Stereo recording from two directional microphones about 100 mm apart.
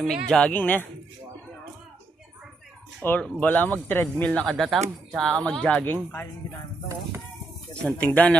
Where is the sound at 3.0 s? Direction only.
15° left (ahead or behind).